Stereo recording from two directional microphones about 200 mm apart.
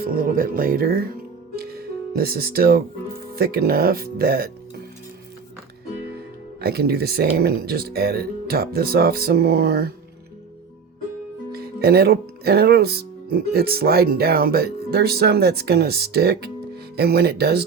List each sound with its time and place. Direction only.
0.0 s speech: 45° right (ahead or behind)
1.5 s music: 50° right (ahead or behind)
3.3 s speech: 50° right (ahead or behind)
6.6 s speech: 50° right (ahead or behind)
11.5 s speech: 50° right (ahead or behind)